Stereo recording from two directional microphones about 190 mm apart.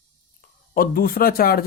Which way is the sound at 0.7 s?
50° left (ahead or behind).